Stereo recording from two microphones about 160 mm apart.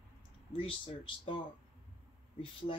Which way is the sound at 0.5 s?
35° left (ahead or behind).